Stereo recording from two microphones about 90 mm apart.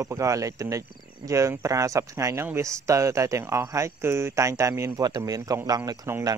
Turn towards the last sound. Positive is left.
turn(degrees=-30)  # may be behind; listen again after turning